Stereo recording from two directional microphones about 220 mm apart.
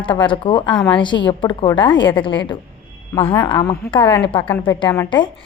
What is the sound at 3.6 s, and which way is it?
Speech, 10° left (ahead or behind).